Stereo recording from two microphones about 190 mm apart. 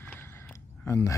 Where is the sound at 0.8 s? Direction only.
15° left (ahead or behind).